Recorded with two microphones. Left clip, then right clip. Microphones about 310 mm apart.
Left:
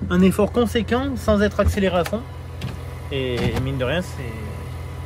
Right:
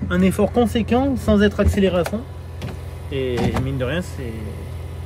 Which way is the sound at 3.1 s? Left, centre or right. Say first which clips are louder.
Right 2 dB; centre.